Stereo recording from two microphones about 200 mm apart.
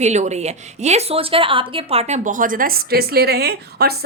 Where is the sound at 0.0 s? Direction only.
35° right (ahead or behind).